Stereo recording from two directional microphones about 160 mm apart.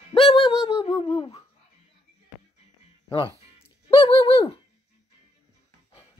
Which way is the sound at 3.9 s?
35° left (ahead or behind).